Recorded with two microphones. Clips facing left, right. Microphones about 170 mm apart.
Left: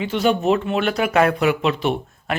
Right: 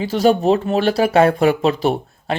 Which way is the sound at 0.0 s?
40° right (ahead or behind).